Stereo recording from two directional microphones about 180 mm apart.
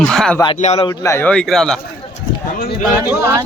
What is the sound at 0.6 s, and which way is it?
Speech, 40° left (ahead or behind).